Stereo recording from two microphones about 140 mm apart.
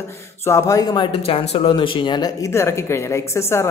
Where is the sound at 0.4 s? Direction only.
20° left (ahead or behind).